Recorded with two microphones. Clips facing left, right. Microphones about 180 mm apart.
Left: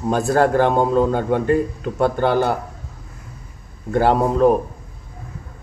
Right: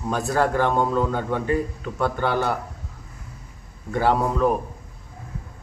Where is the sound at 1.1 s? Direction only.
75° left (ahead or behind).